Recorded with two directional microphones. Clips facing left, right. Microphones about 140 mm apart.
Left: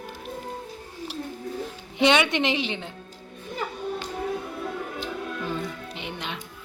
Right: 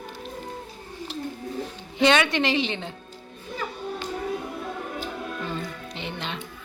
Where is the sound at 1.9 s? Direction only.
15° left (ahead or behind).